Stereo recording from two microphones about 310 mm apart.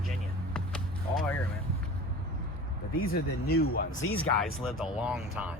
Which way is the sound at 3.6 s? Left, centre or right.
Left.